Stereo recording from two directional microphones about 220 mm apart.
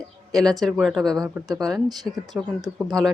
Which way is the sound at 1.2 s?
15° right (ahead or behind).